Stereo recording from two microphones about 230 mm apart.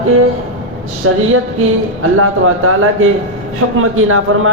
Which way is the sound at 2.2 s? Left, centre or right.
Right.